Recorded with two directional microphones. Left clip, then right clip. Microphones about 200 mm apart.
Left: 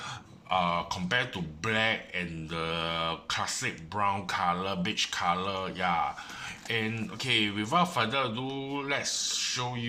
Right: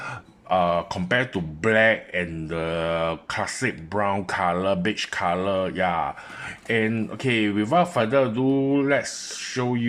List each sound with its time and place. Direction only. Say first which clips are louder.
0.4 s speech: right 7 dB; 45° right (ahead or behind)